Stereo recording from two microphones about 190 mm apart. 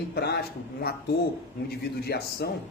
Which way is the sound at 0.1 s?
55° left (ahead or behind).